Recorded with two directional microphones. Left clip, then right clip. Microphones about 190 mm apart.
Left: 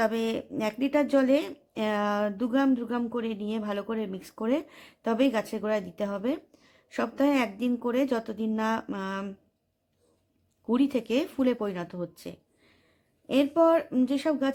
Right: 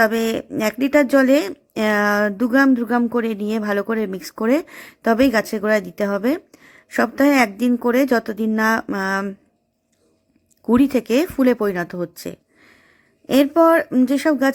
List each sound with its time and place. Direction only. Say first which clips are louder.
0.0 s speech: right 10 dB; 25° right (ahead or behind)
10.7 s speech: right 10 dB; 25° right (ahead or behind)